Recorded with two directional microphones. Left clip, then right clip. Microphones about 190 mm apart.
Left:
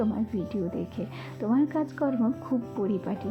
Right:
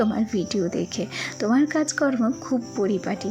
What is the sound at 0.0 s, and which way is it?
A woman's voice, 25° right (ahead or behind).